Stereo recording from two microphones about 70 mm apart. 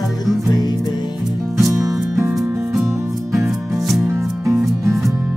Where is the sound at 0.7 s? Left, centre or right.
Left.